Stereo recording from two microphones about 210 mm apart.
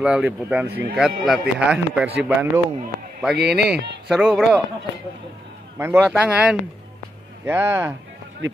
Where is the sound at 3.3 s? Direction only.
50° right (ahead or behind).